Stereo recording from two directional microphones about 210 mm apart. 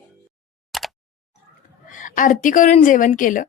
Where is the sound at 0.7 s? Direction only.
Centre (ahead or behind).